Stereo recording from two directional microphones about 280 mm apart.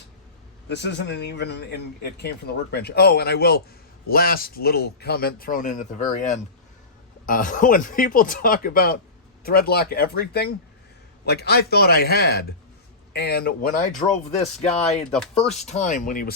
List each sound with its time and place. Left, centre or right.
0.7 s speech: left
14.9 s speech: centre
15.7 s speech: left